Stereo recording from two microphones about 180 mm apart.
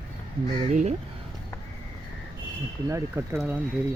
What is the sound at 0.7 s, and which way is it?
Speech, 40° right (ahead or behind).